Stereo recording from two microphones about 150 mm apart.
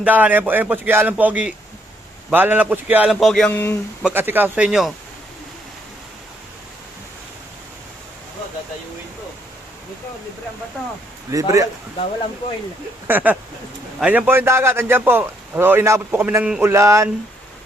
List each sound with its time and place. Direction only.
0.0 s a man's voice: 10° right (ahead or behind)
4.0 s a man's voice: 15° right (ahead or behind)
11.3 s a man's voice: 20° right (ahead or behind)
13.1 s a man's voice: 10° right (ahead or behind)